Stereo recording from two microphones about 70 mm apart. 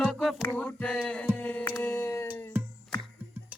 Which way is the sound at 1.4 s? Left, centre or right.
Left.